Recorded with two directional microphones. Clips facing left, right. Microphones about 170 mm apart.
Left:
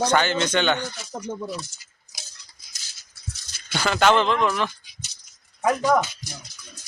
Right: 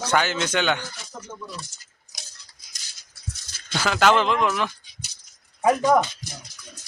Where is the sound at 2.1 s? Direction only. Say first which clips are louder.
Even; 5° left (ahead or behind).